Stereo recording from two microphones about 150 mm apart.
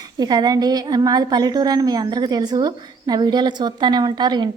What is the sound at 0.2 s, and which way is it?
A woman's voice, 25° right (ahead or behind).